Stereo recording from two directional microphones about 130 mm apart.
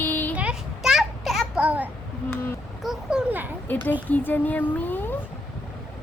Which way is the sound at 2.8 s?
5° right (ahead or behind).